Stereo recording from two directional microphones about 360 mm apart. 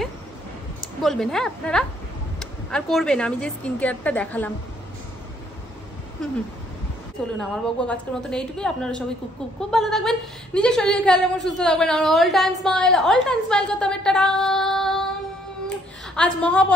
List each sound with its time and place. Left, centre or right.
1.0 s a woman's voice: centre
7.3 s a woman's voice: centre
16.2 s a woman's voice: centre